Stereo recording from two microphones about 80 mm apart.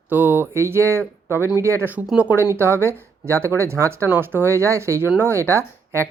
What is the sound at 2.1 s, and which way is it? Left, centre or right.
Speech, centre.